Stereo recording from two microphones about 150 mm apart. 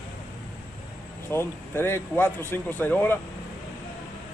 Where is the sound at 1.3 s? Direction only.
15° left (ahead or behind).